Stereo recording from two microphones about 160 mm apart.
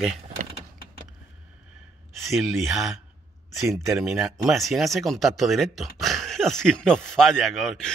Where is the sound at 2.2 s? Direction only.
Centre (ahead or behind).